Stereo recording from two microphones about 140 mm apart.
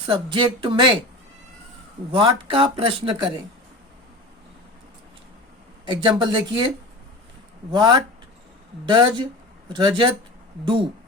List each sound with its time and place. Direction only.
0.1 s speech: 35° right (ahead or behind)
2.1 s speech: 40° right (ahead or behind)
5.8 s speech: 35° right (ahead or behind)
7.7 s speech: 35° right (ahead or behind)